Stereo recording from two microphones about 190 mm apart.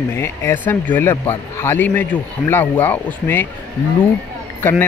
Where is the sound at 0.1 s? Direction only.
15° left (ahead or behind).